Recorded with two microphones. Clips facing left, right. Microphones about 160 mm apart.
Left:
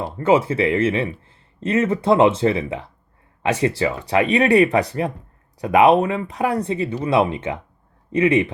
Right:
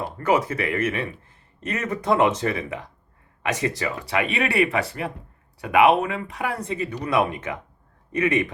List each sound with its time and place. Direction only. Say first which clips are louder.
0.0 s speech: left 5 dB; 25° left (ahead or behind)